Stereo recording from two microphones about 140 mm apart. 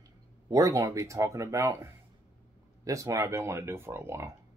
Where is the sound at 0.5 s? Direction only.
25° right (ahead or behind).